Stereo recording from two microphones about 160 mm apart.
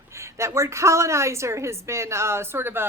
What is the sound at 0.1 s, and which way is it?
A woman's voice, 15° right (ahead or behind).